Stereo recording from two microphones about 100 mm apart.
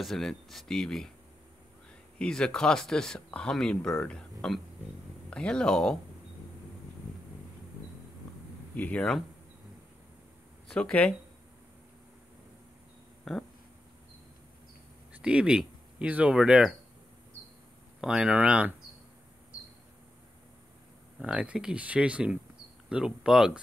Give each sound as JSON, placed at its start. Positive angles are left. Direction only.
{"t": 0.0, "sound": "speech", "side_deg": 5}
{"t": 2.1, "sound": "speech", "side_deg": 10}
{"t": 8.7, "sound": "speech", "side_deg": 15}
{"t": 10.7, "sound": "speech", "side_deg": 10}
{"t": 13.2, "sound": "speech", "side_deg": 5}
{"t": 15.2, "sound": "speech", "side_deg": -10}
{"t": 18.0, "sound": "speech", "side_deg": -10}
{"t": 21.2, "sound": "speech", "side_deg": -10}